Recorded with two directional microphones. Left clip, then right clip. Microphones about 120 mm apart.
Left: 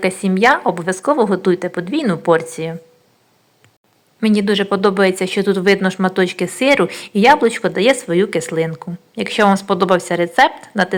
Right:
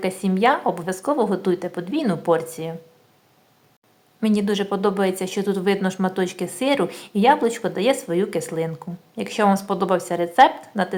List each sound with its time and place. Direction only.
0.0 s speech: 20° left (ahead or behind)
4.4 s speech: 20° left (ahead or behind)